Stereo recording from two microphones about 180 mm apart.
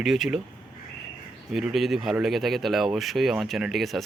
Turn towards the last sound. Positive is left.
turn(degrees=0)  # may be behind; listen again after turning